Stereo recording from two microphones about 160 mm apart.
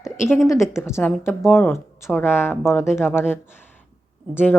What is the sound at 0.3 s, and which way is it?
Speech, 15° left (ahead or behind).